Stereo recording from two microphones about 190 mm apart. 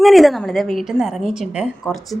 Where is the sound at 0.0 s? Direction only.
Centre (ahead or behind).